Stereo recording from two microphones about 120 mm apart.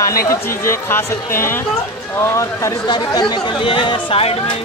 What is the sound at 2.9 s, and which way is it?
Speech, 35° left (ahead or behind).